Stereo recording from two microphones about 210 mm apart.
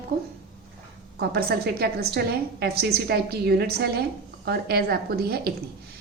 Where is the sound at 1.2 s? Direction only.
50° right (ahead or behind).